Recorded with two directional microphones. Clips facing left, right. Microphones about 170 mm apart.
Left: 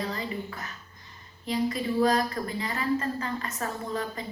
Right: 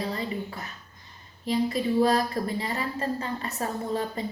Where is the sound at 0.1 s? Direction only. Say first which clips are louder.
Right 2 dB; 35° right (ahead or behind).